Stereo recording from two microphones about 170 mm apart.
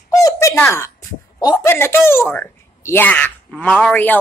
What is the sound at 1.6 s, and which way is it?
Speech, 15° left (ahead or behind).